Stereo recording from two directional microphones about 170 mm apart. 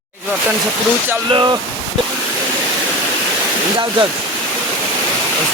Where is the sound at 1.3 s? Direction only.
30° right (ahead or behind).